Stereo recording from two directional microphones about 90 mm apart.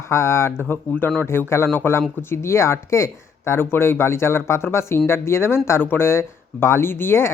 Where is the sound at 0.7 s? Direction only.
20° left (ahead or behind).